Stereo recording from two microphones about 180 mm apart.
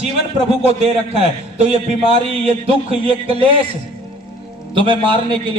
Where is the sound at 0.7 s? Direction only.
35° right (ahead or behind).